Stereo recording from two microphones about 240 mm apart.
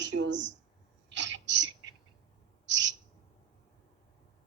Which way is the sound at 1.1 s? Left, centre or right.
Right.